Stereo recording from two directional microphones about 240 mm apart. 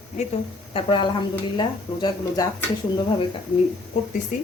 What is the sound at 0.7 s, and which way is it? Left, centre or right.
Speech, left.